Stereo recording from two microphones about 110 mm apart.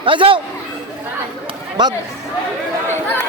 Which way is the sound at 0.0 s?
50° right (ahead or behind).